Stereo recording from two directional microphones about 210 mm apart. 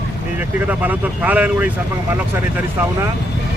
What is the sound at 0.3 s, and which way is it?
Speech, 10° right (ahead or behind).